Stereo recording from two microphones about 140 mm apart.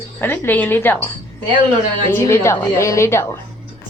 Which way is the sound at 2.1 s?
20° left (ahead or behind).